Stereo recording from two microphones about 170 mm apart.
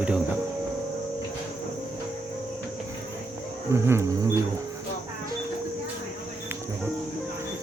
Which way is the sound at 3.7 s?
15° right (ahead or behind).